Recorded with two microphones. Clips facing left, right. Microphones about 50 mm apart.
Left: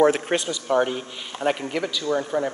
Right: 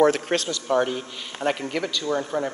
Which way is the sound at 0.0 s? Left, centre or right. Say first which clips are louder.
Left 1 dB; centre.